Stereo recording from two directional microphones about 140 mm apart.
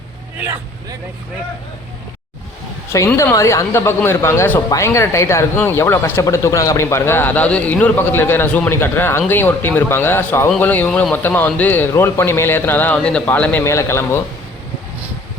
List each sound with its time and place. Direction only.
3.2 s speech: 20° left (ahead or behind)